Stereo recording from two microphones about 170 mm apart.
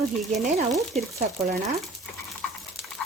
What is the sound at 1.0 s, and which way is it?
Speech, 45° right (ahead or behind).